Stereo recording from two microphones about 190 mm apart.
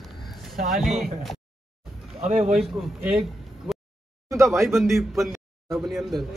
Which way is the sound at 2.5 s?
Centre (ahead or behind).